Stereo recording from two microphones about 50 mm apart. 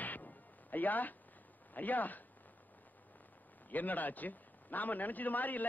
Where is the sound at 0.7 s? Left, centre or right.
Left.